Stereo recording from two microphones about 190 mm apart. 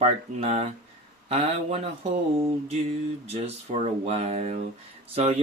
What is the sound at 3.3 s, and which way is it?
Speech, 35° right (ahead or behind).